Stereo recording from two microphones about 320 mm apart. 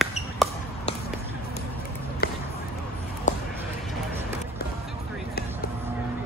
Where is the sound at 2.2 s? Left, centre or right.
Left.